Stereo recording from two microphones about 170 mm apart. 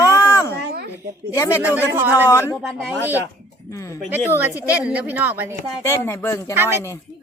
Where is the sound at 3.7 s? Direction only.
20° left (ahead or behind).